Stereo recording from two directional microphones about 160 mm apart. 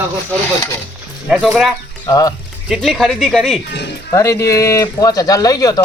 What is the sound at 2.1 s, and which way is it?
Speech, 20° left (ahead or behind).